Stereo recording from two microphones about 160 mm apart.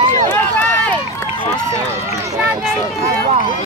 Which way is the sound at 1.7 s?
20° right (ahead or behind).